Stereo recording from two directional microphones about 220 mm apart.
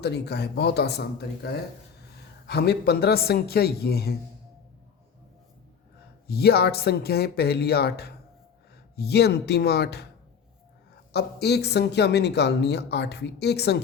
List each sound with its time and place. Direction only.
0.0 s speech: 50° left (ahead or behind)
6.2 s speech: 45° left (ahead or behind)
11.1 s speech: 50° left (ahead or behind)